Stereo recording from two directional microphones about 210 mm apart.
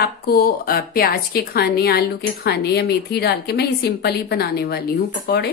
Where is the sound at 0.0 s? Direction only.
45° left (ahead or behind).